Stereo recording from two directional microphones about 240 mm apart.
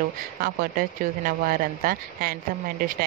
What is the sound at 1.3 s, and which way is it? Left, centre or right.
Speech, right.